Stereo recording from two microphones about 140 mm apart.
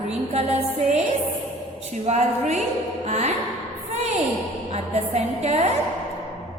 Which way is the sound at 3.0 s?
55° right (ahead or behind).